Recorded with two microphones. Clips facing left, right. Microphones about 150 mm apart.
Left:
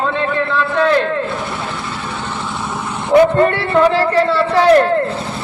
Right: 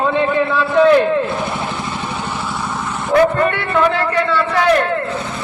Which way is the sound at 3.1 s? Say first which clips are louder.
Left 3 dB; 30° left (ahead or behind).